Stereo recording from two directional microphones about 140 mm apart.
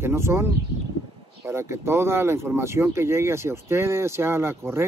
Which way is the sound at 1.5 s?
20° right (ahead or behind).